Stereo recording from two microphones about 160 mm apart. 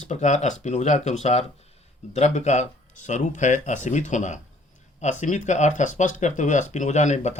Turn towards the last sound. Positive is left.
turn(degrees=45)  # may be behind; listen again after turning